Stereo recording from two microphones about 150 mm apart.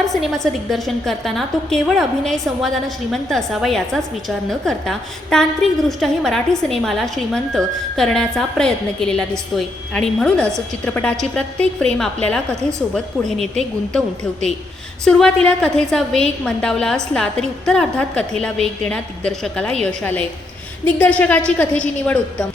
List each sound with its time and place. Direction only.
0.1 s a woman's voice: centre (ahead or behind)
15.0 s a woman's voice: 5° left (ahead or behind)